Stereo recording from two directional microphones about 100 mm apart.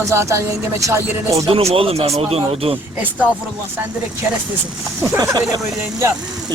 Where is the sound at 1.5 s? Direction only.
75° right (ahead or behind).